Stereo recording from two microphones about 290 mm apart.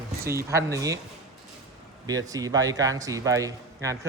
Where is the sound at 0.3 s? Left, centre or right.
Centre.